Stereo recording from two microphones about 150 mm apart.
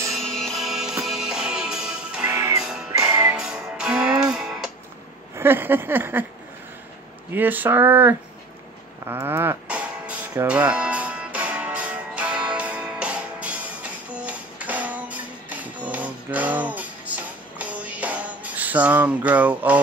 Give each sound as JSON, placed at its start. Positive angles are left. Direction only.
{"t": 0.1, "sound": "music", "side_deg": 5}
{"t": 2.3, "sound": "music", "side_deg": -20}
{"t": 3.3, "sound": "music", "side_deg": -5}
{"t": 5.3, "sound": "a sound", "side_deg": -15}
{"t": 7.3, "sound": "a sound", "side_deg": -10}
{"t": 9.0, "sound": "music", "side_deg": -15}